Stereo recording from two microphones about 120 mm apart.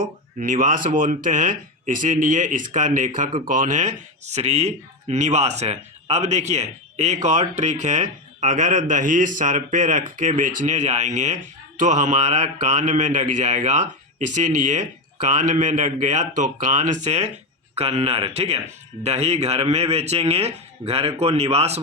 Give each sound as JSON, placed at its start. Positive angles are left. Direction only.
{"t": 0.3, "sound": "speech", "side_deg": -90}
{"t": 17.7, "sound": "a man's voice", "side_deg": -60}